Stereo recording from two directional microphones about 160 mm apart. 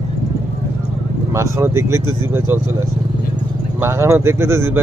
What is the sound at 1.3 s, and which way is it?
Speech, 20° right (ahead or behind).